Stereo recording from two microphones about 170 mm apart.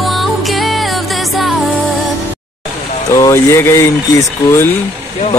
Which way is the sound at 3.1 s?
20° left (ahead or behind).